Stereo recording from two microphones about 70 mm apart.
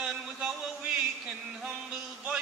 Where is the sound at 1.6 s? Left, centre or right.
Centre.